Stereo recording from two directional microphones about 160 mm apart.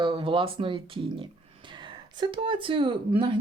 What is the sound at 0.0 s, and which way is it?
Speech, 30° right (ahead or behind).